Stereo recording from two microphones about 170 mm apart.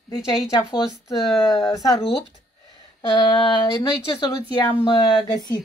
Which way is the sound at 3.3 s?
25° left (ahead or behind).